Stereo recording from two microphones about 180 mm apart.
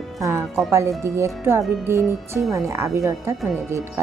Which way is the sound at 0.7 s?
15° right (ahead or behind).